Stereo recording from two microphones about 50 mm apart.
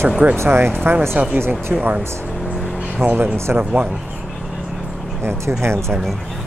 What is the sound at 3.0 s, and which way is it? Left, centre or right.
Speech, right.